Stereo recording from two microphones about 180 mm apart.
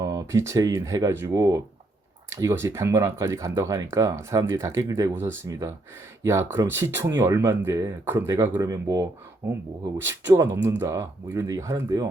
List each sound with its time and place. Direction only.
0.0 s speech: 20° right (ahead or behind)